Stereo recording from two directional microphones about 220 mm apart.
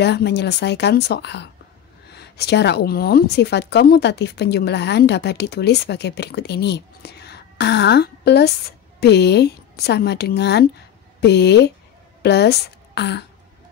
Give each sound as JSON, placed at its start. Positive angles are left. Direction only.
{"t": 0.0, "sound": "a woman's voice", "side_deg": 50}